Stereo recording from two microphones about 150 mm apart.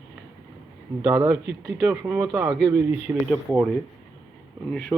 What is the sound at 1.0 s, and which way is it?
Speech, 25° right (ahead or behind).